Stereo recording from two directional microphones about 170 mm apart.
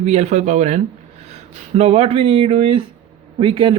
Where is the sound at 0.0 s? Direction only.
40° right (ahead or behind).